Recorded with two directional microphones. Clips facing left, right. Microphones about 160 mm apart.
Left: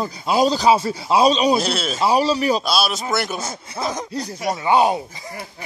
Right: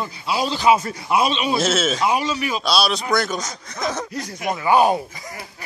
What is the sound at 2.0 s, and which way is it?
Speech, 35° left (ahead or behind).